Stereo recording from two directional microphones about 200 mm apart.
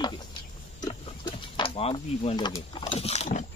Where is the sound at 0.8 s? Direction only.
20° left (ahead or behind).